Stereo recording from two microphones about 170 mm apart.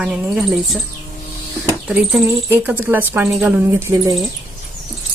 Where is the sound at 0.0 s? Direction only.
Centre (ahead or behind).